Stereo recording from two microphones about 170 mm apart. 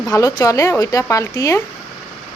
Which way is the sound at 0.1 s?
20° left (ahead or behind).